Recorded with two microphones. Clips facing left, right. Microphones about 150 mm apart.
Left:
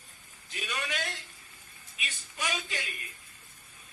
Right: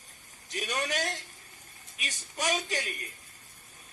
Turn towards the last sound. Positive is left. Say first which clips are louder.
# right 5 dB
turn(degrees=-40)  # may be behind; listen again after turning